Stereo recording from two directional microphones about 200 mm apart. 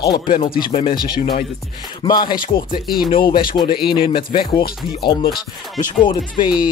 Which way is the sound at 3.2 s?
45° left (ahead or behind).